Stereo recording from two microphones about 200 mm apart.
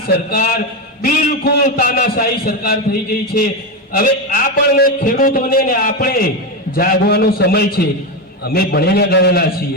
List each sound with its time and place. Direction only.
0.3 s a man's voice: 45° left (ahead or behind)
3.9 s a man's voice: 45° left (ahead or behind)